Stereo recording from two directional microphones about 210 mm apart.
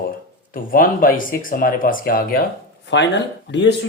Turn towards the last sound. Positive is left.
turn(degrees=55)  # may be behind; listen again after turning